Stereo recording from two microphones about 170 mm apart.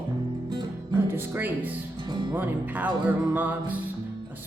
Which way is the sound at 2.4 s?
10° right (ahead or behind).